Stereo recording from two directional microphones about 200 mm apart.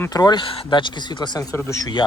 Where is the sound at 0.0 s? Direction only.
20° left (ahead or behind).